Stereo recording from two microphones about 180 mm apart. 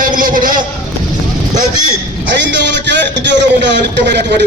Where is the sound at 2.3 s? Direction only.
80° right.